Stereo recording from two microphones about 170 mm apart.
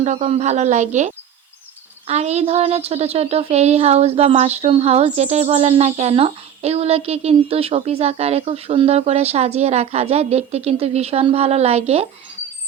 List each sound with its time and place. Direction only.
0.0 s speech: 40° right (ahead or behind)